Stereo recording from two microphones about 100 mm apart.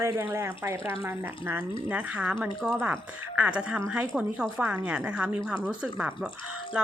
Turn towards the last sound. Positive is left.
turn(degrees=-10)  # may be behind; listen again after turning